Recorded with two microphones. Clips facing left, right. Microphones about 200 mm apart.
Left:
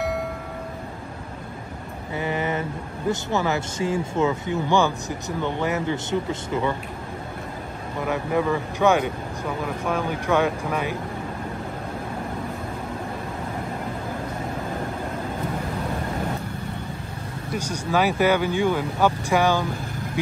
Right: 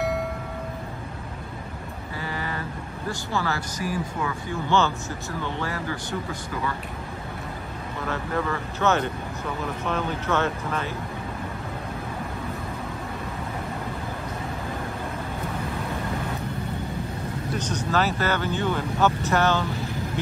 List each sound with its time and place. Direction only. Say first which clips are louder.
2.1 s vehicle: left 7 dB; 20° left (ahead or behind)
3.1 s speech: left 5 dB; 20° left (ahead or behind)
8.0 s speech: left 5 dB; 15° left (ahead or behind)
17.6 s speech: left 3 dB; 10° left (ahead or behind)